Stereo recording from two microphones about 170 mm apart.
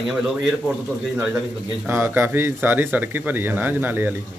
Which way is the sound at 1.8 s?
10° right (ahead or behind).